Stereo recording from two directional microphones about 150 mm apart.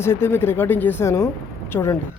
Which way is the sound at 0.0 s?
15° left (ahead or behind).